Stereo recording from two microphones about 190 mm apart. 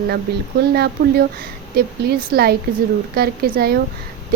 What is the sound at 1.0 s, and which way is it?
Speech, 70° right (ahead or behind).